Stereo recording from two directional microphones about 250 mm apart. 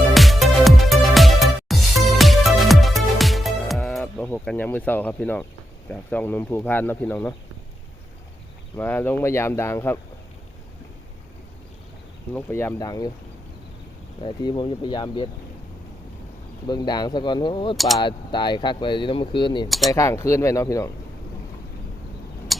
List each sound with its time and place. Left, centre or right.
0.1 s music: centre
5.9 s speech: centre
8.7 s speech: centre
12.3 s speech: centre
14.2 s speech: centre
16.6 s speech: centre
19.6 s speech: centre
19.9 s speech: centre